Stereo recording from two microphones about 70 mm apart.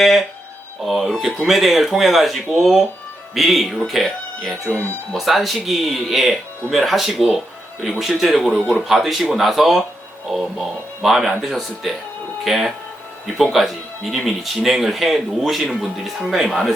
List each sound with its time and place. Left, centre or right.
0.8 s speech: centre
4.7 s speech: left
5.1 s speech: centre